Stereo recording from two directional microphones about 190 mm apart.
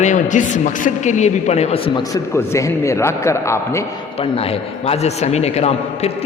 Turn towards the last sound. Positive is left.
turn(degrees=35)  # may be behind; listen again after turning